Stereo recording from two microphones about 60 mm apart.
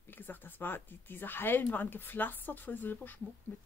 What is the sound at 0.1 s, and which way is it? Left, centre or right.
Speech, left.